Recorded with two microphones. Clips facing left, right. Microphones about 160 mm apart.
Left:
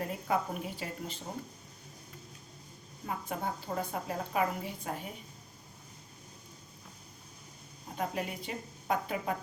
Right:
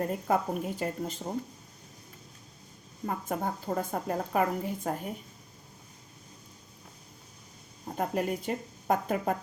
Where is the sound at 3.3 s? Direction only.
45° right (ahead or behind).